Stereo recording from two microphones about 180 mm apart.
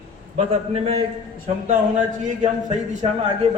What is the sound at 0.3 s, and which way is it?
Speech, 35° right (ahead or behind).